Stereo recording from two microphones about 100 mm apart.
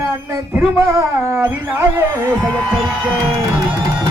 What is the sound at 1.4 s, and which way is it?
Speech, 20° right (ahead or behind).